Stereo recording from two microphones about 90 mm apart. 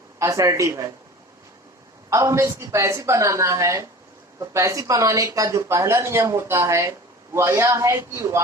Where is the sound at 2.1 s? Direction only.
35° right (ahead or behind).